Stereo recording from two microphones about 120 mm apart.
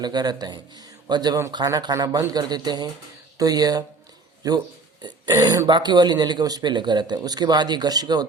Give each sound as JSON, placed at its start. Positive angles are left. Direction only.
{"t": 0.0, "sound": "speech", "side_deg": -35}